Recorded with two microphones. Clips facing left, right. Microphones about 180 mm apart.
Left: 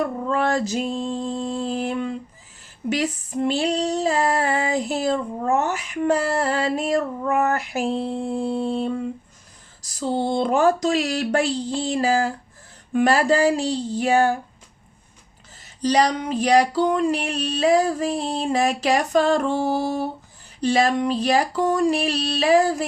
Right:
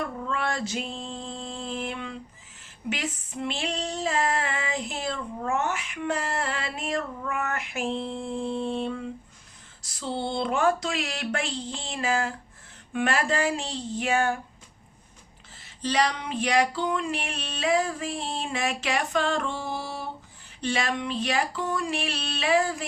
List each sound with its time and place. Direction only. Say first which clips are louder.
0.0 s a sound: left 8 dB; 40° left (ahead or behind)
2.9 s female singing: left 9 dB; 40° left (ahead or behind)
15.8 s female singing: left 7 dB; 40° left (ahead or behind)